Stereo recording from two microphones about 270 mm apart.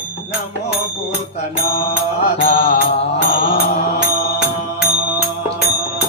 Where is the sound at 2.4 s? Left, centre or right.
Left.